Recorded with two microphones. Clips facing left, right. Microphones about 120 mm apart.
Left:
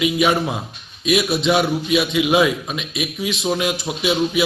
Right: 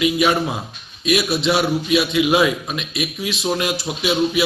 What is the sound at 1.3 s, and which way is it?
A man's voice, 15° left (ahead or behind).